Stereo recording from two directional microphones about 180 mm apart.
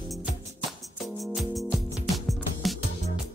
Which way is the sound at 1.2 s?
Centre (ahead or behind).